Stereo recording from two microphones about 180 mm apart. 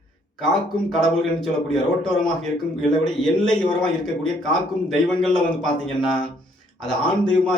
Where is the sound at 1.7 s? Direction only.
Centre (ahead or behind).